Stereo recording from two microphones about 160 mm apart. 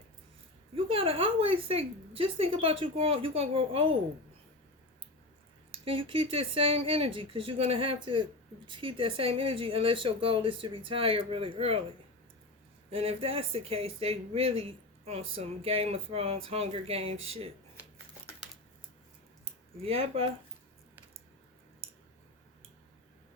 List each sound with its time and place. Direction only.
0.9 s speech: 35° right (ahead or behind)
5.7 s speech: 35° right (ahead or behind)
12.9 s speech: 35° right (ahead or behind)
19.8 s speech: 35° right (ahead or behind)